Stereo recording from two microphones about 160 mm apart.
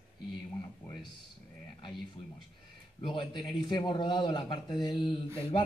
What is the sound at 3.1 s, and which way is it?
A man's voice, 30° left (ahead or behind).